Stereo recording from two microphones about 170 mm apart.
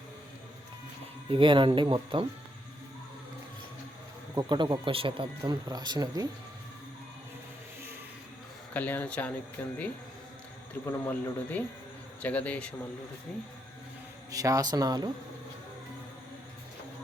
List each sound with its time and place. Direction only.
1.3 s speech: 30° right (ahead or behind)
4.4 s speech: 25° right (ahead or behind)
8.7 s speech: 10° left (ahead or behind)
10.8 s speech: 15° left (ahead or behind)
14.3 s speech: 20° right (ahead or behind)